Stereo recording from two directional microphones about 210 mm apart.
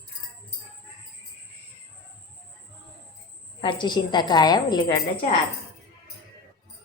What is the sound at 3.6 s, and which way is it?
A woman's voice, 20° left (ahead or behind).